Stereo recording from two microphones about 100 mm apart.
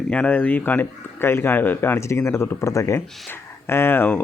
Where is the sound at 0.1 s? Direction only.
15° left (ahead or behind).